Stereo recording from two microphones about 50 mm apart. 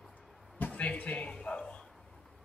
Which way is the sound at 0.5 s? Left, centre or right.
Left.